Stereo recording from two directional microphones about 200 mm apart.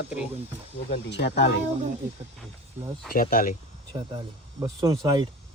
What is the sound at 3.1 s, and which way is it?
Speech, 45° left (ahead or behind).